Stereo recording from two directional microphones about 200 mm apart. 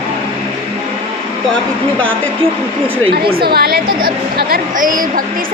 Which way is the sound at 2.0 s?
5° left (ahead or behind).